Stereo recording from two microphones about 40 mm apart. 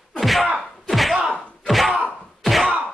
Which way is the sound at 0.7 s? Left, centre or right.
Centre.